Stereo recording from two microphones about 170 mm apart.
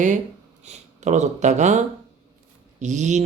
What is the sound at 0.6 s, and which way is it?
Speech, 40° right (ahead or behind).